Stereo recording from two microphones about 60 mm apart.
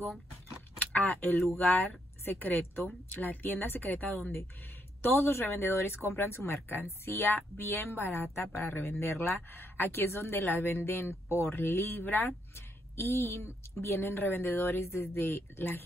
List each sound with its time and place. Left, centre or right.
0.7 s a woman's voice: left